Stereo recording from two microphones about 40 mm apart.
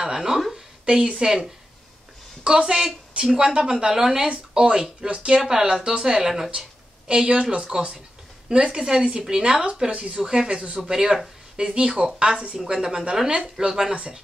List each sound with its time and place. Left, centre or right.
0.0 s a sound: centre
0.8 s speech: right
1.2 s speech: centre
4.3 s speech: right
5.4 s speech: centre
7.1 s speech: right
10.8 s speech: centre